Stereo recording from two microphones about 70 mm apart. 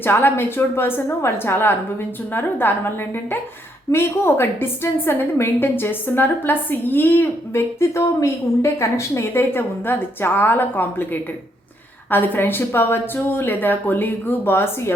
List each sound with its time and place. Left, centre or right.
0.0 s a woman's voice: left
3.9 s a woman's voice: left